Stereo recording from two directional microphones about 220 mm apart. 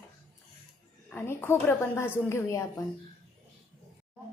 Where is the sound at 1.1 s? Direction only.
10° left (ahead or behind).